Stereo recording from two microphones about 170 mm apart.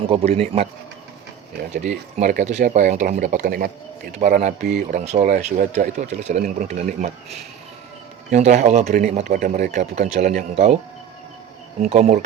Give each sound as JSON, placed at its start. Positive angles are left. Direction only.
{"t": 0.0, "sound": "a man's voice", "side_deg": -35}
{"t": 1.7, "sound": "a man's voice", "side_deg": -45}
{"t": 11.8, "sound": "speech", "side_deg": -40}